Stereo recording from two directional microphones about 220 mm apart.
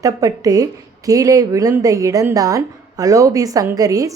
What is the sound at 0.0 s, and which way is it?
A woman's voice, 15° right (ahead or behind).